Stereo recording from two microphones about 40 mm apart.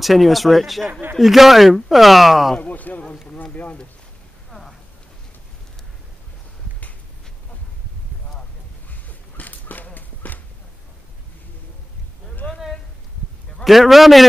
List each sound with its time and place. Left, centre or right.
0.0 s speech: centre
2.6 s speech: left
4.5 s a sound: centre
9.4 s clip-clop: left
12.4 s a sound: left
13.7 s speech: centre